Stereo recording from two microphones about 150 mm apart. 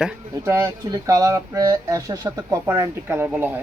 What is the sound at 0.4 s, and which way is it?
Speech, 20° right (ahead or behind).